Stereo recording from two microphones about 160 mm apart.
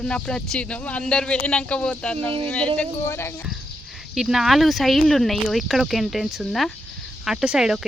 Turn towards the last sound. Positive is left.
turn(degrees=-5)  # may be behind; listen again after turning